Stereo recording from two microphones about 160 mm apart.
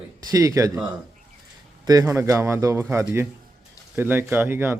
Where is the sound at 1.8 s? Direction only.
20° right (ahead or behind).